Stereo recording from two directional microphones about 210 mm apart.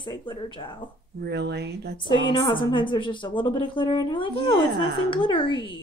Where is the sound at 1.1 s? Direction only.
55° right (ahead or behind).